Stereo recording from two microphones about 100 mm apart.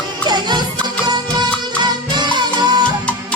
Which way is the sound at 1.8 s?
50° right (ahead or behind).